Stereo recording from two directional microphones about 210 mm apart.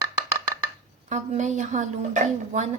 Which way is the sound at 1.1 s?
35° right (ahead or behind).